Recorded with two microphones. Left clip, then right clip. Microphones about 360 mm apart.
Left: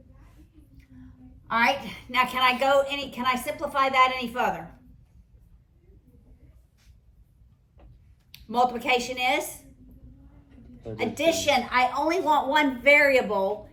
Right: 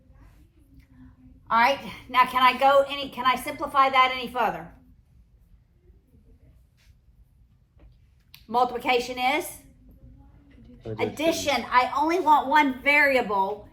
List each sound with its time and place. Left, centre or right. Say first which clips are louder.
1.5 s a woman's voice: right 2 dB; centre
8.3 s a woman's voice: even; centre
10.9 s a woman's voice: left 1 dB; centre